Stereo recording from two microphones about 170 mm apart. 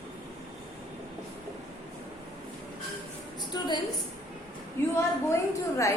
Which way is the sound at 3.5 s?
25° left (ahead or behind).